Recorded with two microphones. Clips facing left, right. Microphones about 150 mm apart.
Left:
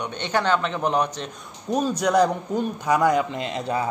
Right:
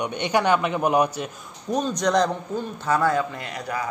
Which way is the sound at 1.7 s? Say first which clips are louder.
Left 2 dB; 5° left (ahead or behind).